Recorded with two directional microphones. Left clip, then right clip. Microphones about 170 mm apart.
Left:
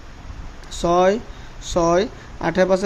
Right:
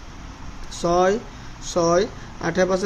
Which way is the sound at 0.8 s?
35° left (ahead or behind).